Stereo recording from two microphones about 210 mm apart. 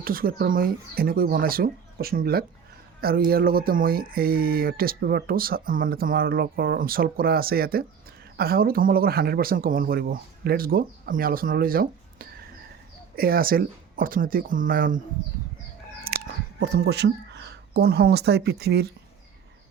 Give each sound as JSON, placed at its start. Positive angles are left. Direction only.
{"t": 0.0, "sound": "speech", "side_deg": -45}
{"t": 16.0, "sound": "speech", "side_deg": -50}